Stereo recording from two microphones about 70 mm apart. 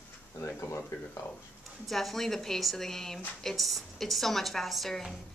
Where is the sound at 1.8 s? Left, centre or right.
Centre.